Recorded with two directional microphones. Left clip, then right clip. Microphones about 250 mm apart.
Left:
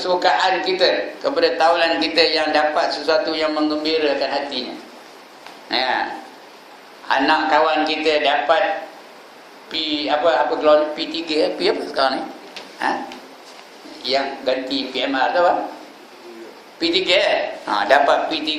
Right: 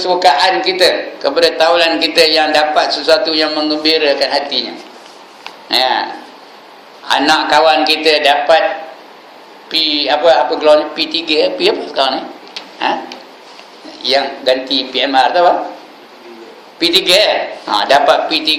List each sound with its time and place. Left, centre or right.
0.0 s a man's voice: centre
5.6 s speech: centre
7.1 s a man's voice: centre
9.6 s a man's voice: centre
14.0 s a man's voice: centre
16.8 s a man's voice: centre